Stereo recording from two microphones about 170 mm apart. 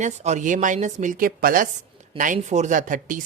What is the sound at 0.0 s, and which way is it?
Speech, 45° right (ahead or behind).